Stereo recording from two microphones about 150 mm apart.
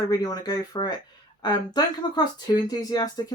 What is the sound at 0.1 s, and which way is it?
Speech, 25° left (ahead or behind).